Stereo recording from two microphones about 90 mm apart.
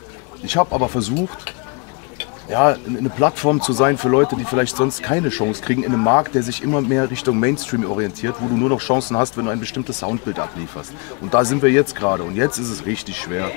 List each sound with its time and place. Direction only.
0.6 s speech: 25° left (ahead or behind)
2.5 s speech: 25° left (ahead or behind)